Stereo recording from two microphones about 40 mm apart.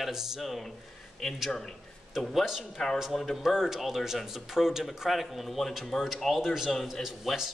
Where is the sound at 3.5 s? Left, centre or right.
Centre.